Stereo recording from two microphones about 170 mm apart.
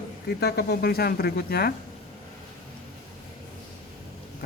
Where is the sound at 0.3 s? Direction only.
70° left (ahead or behind).